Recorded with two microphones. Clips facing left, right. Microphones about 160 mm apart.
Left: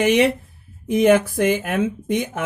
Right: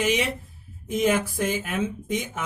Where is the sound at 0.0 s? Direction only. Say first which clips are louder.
Left 8 dB; 60° left (ahead or behind).